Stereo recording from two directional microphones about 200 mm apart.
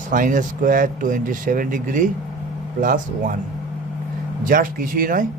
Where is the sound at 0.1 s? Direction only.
40° right (ahead or behind).